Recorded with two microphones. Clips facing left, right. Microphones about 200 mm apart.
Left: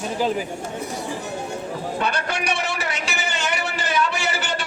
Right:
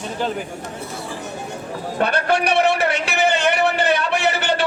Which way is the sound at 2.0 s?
60° right (ahead or behind).